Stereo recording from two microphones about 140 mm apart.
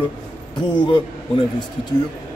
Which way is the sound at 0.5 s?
35° left (ahead or behind).